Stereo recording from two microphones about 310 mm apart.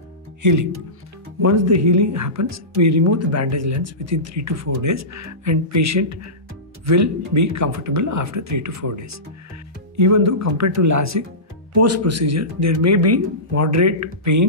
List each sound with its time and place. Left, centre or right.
0.4 s speech: right
1.4 s speech: right